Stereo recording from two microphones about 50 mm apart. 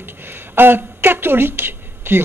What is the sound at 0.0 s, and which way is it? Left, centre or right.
A woman's voice, right.